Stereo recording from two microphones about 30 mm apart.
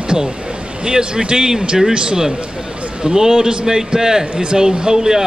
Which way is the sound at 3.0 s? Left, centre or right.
Right.